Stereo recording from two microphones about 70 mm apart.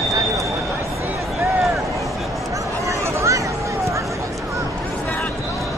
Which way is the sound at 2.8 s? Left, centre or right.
Right.